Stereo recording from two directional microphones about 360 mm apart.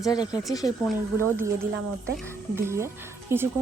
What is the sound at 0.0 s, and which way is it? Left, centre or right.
Speech, centre.